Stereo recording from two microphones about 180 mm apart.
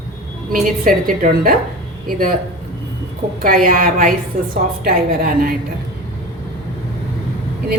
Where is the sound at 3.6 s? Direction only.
50° right (ahead or behind).